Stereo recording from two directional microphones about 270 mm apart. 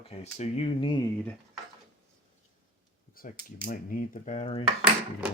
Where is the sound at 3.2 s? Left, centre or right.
Left.